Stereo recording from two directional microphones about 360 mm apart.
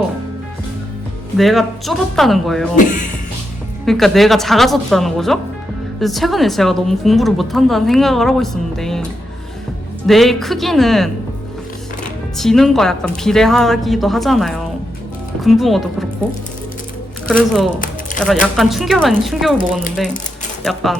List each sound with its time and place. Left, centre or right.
1.4 s speech: centre
2.7 s speech: left
3.8 s speech: centre
10.1 s speech: centre
12.4 s speech: centre
17.2 s speech: centre
20.7 s speech: centre